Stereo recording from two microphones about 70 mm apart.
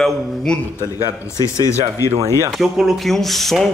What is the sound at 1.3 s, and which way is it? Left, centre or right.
Speech, left.